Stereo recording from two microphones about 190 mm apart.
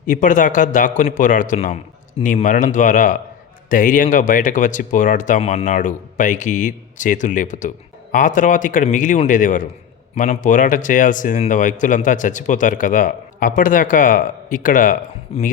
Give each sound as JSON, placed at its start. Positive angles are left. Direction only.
{"t": 0.0, "sound": "speech", "side_deg": 45}
{"t": 15.3, "sound": "speech", "side_deg": 35}